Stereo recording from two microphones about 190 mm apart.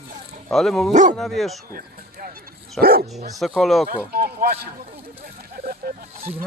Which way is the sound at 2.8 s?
50° right (ahead or behind).